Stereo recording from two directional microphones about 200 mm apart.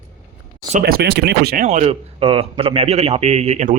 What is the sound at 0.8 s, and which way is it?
Speech, 55° right (ahead or behind).